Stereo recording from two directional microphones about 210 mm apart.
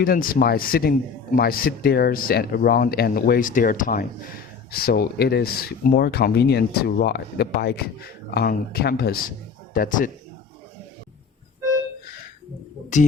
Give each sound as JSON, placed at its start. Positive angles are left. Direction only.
{"t": 0.0, "sound": "a man's voice", "side_deg": 45}